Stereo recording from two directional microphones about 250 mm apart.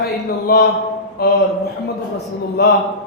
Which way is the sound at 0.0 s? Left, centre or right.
Left.